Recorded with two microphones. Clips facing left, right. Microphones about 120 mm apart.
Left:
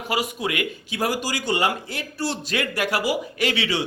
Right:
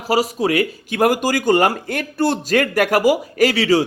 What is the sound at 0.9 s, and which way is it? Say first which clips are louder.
A man's voice: right 9 dB; 50° right (ahead or behind).